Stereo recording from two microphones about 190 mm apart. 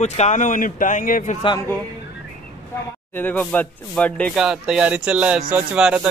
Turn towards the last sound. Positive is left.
turn(degrees=-5)  # may be behind; listen again after turning